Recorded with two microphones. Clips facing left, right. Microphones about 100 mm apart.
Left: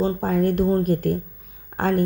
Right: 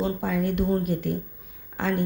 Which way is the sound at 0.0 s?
40° left (ahead or behind).